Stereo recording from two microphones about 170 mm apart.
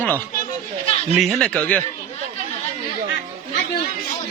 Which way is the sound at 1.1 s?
Centre (ahead or behind).